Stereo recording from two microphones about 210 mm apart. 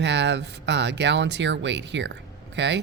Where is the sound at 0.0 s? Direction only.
55° right (ahead or behind).